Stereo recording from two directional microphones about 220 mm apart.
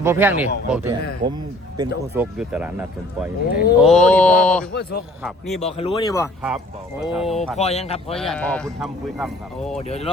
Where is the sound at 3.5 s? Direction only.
45° left (ahead or behind).